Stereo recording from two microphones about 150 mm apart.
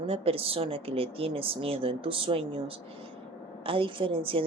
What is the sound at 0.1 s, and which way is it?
A woman's voice, 40° right (ahead or behind).